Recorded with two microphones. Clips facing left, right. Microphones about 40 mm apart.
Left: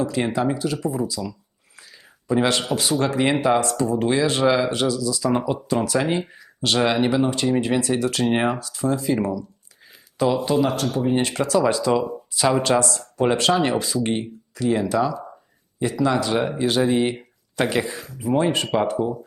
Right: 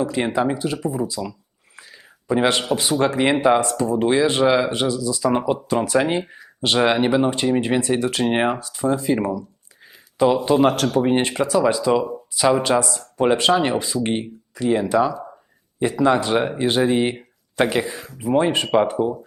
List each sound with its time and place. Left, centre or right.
0.0 s speech: centre
9.8 s a sound: right
10.6 s speech: right
11.3 s speech: centre